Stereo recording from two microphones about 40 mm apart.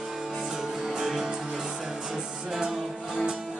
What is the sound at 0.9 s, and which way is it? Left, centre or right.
Music, centre.